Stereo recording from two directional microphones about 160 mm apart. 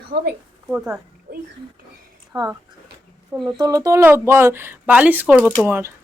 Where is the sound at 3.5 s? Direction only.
30° right (ahead or behind).